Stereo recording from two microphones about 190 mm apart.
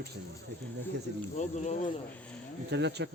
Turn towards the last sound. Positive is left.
turn(degrees=-65)  # may be behind; listen again after turning